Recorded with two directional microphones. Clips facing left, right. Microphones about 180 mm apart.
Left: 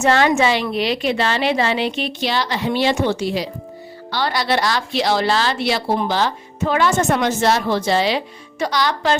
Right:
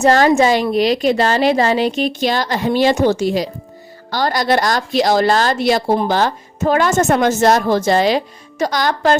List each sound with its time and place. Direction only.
0.0 s a woman's voice: 40° right (ahead or behind)